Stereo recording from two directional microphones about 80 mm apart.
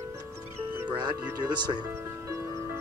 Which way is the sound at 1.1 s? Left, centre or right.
Right.